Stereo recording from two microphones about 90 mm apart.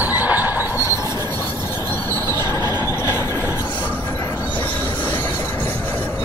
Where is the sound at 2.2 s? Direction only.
30° left (ahead or behind).